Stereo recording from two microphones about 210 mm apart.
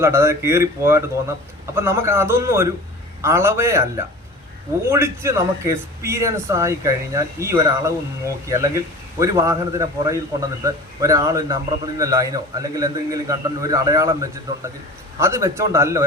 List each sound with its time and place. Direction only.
0.0 s speech: 10° right (ahead or behind)